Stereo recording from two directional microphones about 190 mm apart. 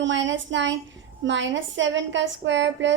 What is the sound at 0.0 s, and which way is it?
Child singing, 75° right (ahead or behind).